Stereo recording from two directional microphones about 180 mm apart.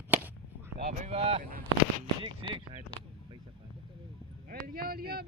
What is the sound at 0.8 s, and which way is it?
Speech, 35° right (ahead or behind).